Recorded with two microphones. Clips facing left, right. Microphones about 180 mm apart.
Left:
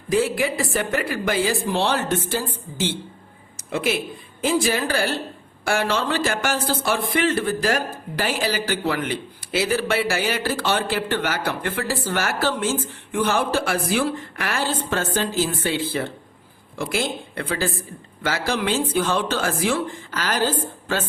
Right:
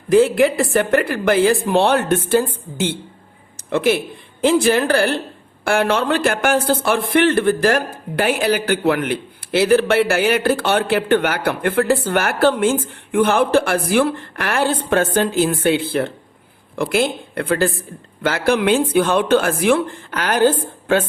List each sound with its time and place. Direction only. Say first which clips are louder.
0.1 s a man's voice: right 8 dB; 55° right (ahead or behind)